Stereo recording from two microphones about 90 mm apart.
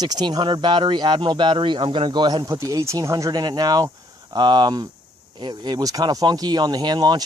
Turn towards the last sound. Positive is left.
turn(degrees=-55)  # may be behind; listen again after turning